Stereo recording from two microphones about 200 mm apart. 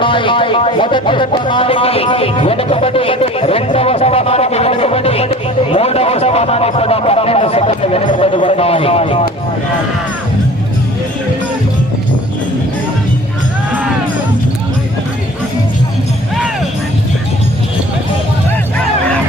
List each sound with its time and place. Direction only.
0.0 s speech: 25° left (ahead or behind)